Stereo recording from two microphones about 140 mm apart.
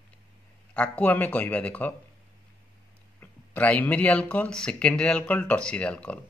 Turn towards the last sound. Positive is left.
turn(degrees=10)  # may be behind; listen again after turning